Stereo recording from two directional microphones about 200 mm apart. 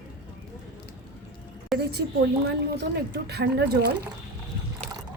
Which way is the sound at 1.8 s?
55° right (ahead or behind).